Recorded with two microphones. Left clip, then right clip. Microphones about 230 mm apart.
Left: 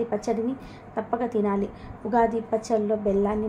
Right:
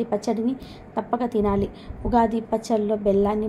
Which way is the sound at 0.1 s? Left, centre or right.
Right.